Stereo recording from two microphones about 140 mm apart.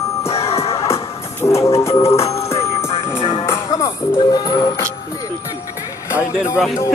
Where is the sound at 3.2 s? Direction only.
40° left (ahead or behind).